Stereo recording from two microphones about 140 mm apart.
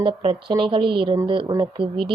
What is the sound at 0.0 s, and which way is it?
Speech, 40° right (ahead or behind).